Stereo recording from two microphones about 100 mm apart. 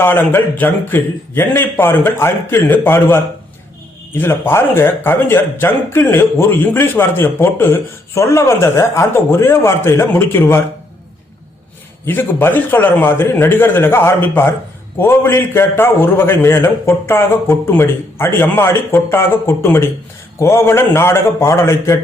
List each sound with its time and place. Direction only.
0.0 s speech: 20° left (ahead or behind)
12.0 s speech: 20° left (ahead or behind)